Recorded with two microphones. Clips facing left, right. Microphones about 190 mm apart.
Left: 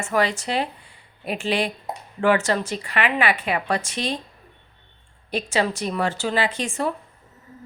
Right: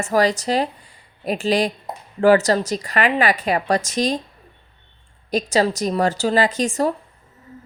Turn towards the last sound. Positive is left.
turn(degrees=-40)  # may be behind; listen again after turning